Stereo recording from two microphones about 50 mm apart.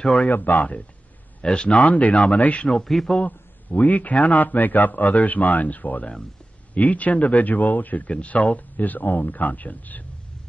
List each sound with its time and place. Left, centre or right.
0.0 s a man's voice: centre
0.4 s speech: left
1.4 s a man's voice: centre
1.8 s speech: left
2.1 s a man's voice: centre
3.1 s speech: left